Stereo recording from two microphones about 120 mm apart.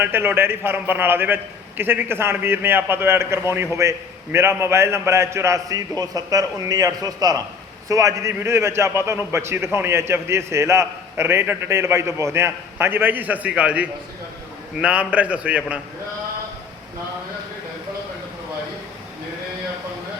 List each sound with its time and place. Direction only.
0.0 s a man's voice: 15° right (ahead or behind)